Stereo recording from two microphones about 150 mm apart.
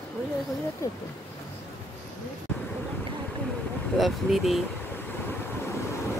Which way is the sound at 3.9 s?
Centre (ahead or behind).